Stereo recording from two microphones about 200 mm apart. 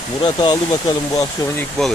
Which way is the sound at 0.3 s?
20° left (ahead or behind).